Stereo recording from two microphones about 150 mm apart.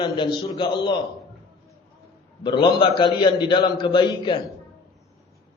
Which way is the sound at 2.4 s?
30° left (ahead or behind).